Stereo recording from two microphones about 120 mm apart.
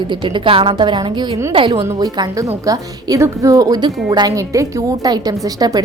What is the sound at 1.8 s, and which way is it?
A woman's voice, 30° right (ahead or behind).